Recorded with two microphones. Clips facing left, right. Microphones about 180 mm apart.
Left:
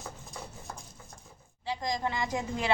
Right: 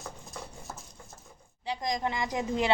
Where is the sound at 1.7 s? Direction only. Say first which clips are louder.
Right 1 dB; 20° right (ahead or behind).